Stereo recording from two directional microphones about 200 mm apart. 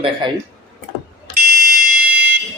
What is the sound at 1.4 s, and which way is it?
Fire alarm, 45° right (ahead or behind).